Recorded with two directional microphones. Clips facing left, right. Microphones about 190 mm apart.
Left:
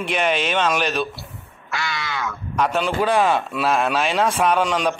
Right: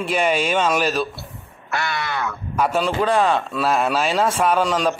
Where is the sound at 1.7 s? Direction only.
55° right (ahead or behind).